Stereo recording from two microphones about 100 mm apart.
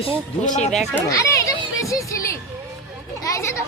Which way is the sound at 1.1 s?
35° left (ahead or behind).